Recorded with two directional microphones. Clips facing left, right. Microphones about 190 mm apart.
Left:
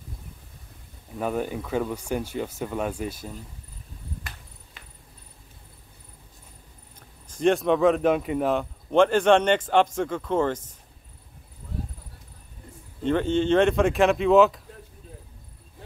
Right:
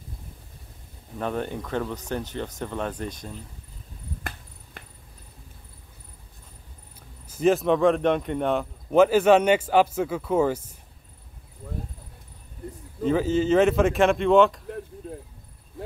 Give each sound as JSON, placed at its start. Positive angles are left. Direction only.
{"t": 1.1, "sound": "speech", "side_deg": 5}
{"t": 4.8, "sound": "a sound", "side_deg": -55}
{"t": 7.2, "sound": "speech", "side_deg": -5}
{"t": 13.0, "sound": "speech", "side_deg": -5}